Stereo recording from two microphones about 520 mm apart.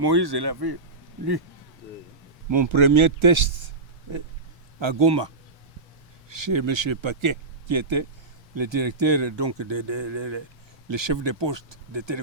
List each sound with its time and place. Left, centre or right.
0.0 s speech: right
2.5 s speech: right
4.8 s speech: right